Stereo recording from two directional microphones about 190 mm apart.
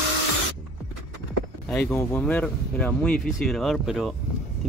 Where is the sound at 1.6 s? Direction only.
5° left (ahead or behind).